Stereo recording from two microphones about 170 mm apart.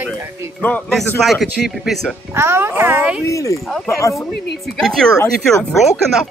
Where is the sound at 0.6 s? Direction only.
5° left (ahead or behind).